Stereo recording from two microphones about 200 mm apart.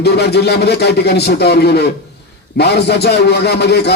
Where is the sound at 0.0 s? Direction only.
55° left (ahead or behind).